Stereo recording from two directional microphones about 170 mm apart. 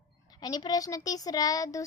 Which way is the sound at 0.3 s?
25° left (ahead or behind).